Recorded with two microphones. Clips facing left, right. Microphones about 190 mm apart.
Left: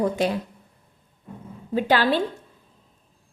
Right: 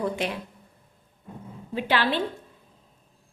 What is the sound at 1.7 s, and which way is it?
Speech, 40° left (ahead or behind).